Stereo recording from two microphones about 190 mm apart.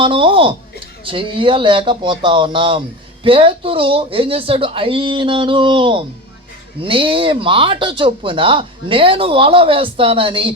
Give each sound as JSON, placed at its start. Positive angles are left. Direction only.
{"t": 0.0, "sound": "speech", "side_deg": -25}